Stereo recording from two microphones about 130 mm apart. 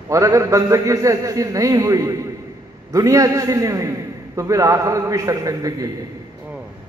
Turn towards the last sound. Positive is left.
turn(degrees=-25)  # may be behind; listen again after turning